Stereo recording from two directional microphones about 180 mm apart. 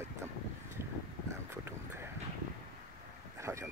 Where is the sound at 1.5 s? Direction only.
15° right (ahead or behind).